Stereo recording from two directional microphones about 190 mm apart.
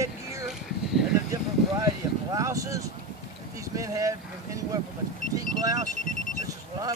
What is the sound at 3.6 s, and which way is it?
Speech, 15° right (ahead or behind).